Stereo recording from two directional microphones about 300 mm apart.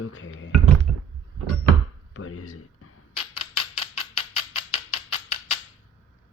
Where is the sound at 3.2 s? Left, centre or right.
Centre.